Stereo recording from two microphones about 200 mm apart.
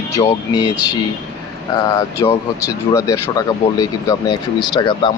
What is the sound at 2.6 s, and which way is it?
Speech, 15° left (ahead or behind).